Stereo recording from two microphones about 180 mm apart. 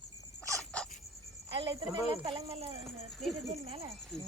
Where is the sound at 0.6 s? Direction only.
5° left (ahead or behind).